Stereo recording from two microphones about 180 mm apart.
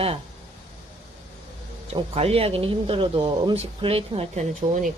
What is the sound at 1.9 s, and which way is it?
Speech, 35° right (ahead or behind).